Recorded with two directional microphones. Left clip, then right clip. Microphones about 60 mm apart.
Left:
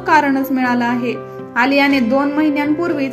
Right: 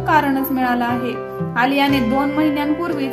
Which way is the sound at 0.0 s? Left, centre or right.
Left.